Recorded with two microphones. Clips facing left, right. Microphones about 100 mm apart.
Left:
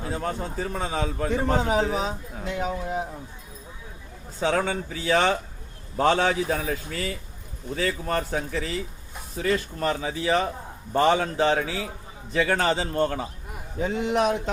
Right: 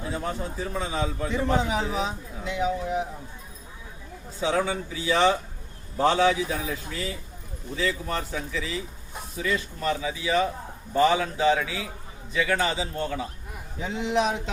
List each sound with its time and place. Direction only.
0.5 s a man's voice: 55° left (ahead or behind)
4.4 s a man's voice: 55° left (ahead or behind)